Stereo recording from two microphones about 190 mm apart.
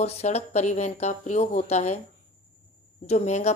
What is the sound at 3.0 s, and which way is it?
Speech, 35° left (ahead or behind).